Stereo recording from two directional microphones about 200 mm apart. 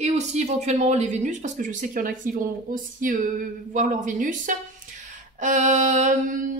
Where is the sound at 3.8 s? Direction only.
40° right (ahead or behind).